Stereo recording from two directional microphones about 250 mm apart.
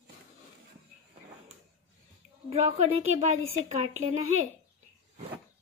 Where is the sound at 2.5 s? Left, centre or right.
Right.